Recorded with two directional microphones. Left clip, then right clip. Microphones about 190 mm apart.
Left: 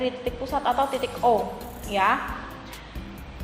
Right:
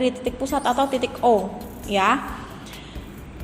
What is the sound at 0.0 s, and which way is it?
A woman's voice, 40° right (ahead or behind).